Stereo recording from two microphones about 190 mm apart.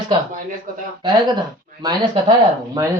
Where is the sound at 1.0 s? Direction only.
20° right (ahead or behind).